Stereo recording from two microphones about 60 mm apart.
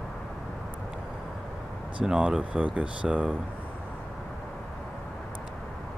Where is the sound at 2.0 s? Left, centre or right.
Centre.